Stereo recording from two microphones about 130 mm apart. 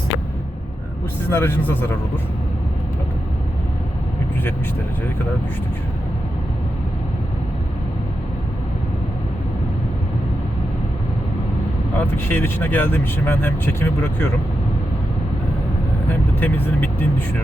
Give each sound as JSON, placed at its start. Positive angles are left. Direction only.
{"t": 1.3, "sound": "speech", "side_deg": 15}
{"t": 11.9, "sound": "speech", "side_deg": 15}
{"t": 16.4, "sound": "speech", "side_deg": 15}